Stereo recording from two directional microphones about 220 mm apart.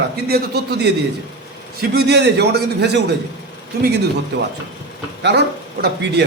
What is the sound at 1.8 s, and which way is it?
A man's voice, 50° right (ahead or behind).